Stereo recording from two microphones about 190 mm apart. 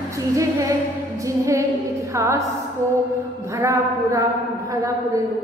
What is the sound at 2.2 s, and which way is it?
Speech, 15° right (ahead or behind).